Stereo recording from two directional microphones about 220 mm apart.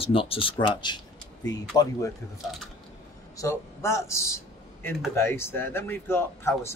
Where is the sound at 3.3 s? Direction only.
15° left (ahead or behind).